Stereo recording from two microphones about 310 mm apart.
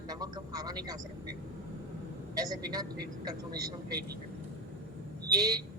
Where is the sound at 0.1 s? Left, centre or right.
Centre.